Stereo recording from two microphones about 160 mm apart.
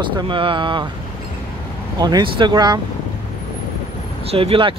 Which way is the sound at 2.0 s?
25° right (ahead or behind).